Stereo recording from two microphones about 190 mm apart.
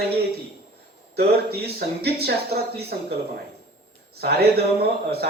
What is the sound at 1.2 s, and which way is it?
Speech, 55° right (ahead or behind).